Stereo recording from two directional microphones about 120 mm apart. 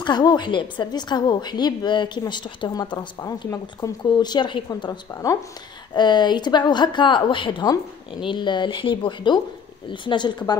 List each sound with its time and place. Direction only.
0.0 s a woman's voice: 35° left (ahead or behind)